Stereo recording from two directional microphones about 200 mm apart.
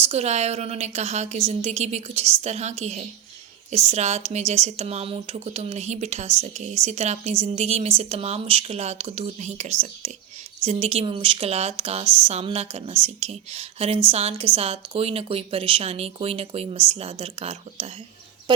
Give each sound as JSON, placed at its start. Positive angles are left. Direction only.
{"t": 0.0, "sound": "a woman's voice", "side_deg": -30}